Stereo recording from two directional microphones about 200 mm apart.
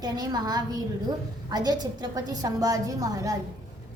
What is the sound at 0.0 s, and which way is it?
A woman's voice, 20° right (ahead or behind).